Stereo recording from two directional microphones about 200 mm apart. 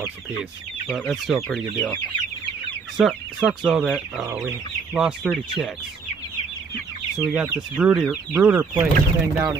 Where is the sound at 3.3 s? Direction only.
5° right (ahead or behind).